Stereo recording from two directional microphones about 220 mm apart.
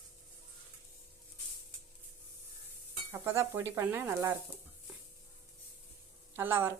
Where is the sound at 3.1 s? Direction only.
10° right (ahead or behind).